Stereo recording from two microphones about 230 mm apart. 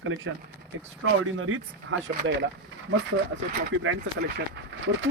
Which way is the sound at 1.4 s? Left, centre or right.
Right.